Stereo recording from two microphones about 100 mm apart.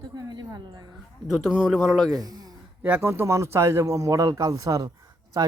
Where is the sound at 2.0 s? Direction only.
40° right (ahead or behind).